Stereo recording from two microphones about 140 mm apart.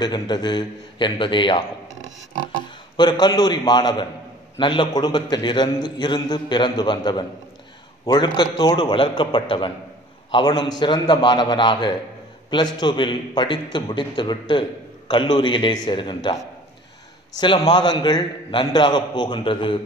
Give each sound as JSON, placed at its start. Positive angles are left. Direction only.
{"t": 0.0, "sound": "a man's voice", "side_deg": 30}
{"t": 3.0, "sound": "a man's voice", "side_deg": 30}
{"t": 17.4, "sound": "a man's voice", "side_deg": 35}